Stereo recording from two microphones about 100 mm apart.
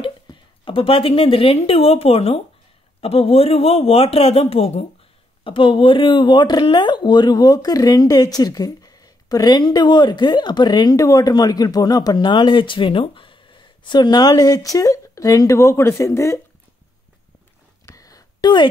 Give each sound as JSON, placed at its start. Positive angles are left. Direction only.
{"t": 0.0, "sound": "speech", "side_deg": 60}
{"t": 5.4, "sound": "speech", "side_deg": 60}
{"t": 17.8, "sound": "a sound", "side_deg": 35}